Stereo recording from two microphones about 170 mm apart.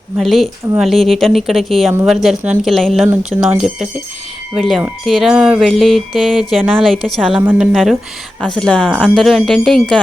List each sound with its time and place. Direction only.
0.2 s speech: centre (ahead or behind)